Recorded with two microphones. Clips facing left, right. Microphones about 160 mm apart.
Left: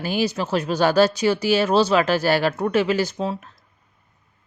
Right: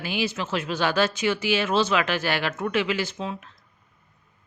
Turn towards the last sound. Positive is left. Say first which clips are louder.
# left 6 dB
turn(degrees=35)  # may be behind; listen again after turning